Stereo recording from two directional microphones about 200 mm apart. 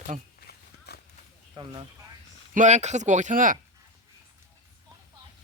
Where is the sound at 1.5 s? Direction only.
20° right (ahead or behind).